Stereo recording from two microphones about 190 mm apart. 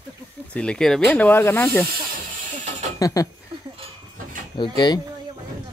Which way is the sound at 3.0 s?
20° left (ahead or behind).